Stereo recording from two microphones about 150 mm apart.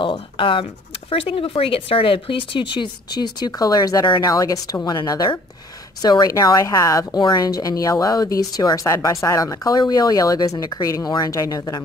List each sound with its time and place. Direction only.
0.0 s a woman's voice: 35° left (ahead or behind)